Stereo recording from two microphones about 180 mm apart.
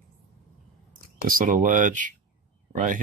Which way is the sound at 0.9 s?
50° right (ahead or behind).